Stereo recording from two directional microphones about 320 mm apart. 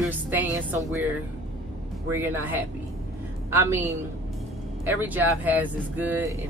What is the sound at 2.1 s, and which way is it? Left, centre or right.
A woman's voice, centre.